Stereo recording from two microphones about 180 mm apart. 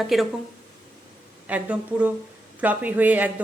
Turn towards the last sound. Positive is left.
turn(degrees=-10)  # may be behind; listen again after turning